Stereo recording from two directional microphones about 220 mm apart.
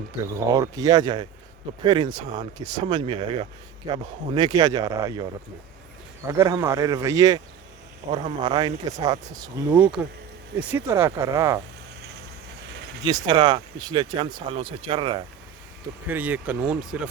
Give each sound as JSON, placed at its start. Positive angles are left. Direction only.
{"t": 0.3, "sound": "speech", "side_deg": -15}
{"t": 6.3, "sound": "speech", "side_deg": -10}
{"t": 13.1, "sound": "speech", "side_deg": -20}
{"t": 16.0, "sound": "speech", "side_deg": -10}